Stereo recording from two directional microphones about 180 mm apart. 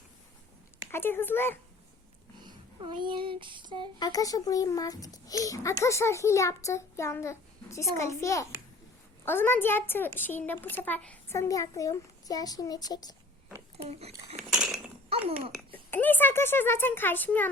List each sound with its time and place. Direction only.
0.9 s a woman's voice: 15° left (ahead or behind)
2.4 s a sound: 25° right (ahead or behind)
4.0 s a woman's voice: 20° left (ahead or behind)
13.8 s speech: 35° right (ahead or behind)
14.3 s cutlery: 5° right (ahead or behind)
15.7 s a woman's voice: 10° left (ahead or behind)